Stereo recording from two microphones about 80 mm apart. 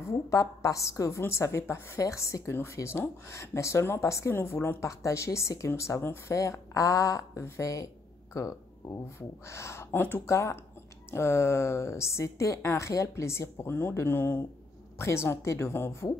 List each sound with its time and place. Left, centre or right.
0.3 s a woman's voice: left
10.3 s a woman's voice: left